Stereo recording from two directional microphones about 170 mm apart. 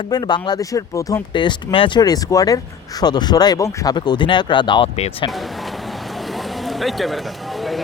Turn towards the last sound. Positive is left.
turn(degrees=0)  # may be behind; listen again after turning